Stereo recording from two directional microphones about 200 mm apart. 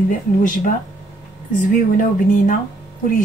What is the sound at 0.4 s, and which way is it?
A woman's voice, 40° left (ahead or behind).